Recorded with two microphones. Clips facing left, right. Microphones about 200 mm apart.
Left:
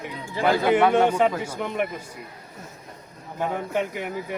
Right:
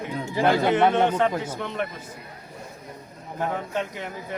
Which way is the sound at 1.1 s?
10° left (ahead or behind).